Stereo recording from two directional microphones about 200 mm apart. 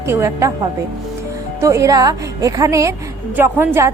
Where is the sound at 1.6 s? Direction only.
15° right (ahead or behind).